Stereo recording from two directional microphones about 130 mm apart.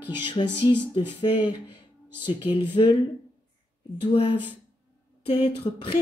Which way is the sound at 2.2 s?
45° left (ahead or behind).